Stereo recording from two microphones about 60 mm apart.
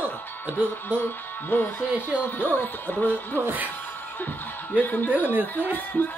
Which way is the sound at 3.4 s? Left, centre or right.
Right.